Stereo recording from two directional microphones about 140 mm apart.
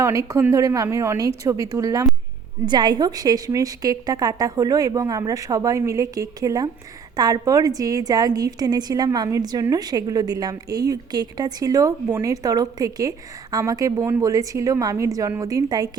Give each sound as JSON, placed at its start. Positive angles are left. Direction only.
{"t": 0.0, "sound": "a woman's voice", "side_deg": -20}